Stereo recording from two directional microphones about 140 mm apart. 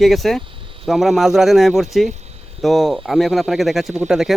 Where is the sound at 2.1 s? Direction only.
50° right (ahead or behind).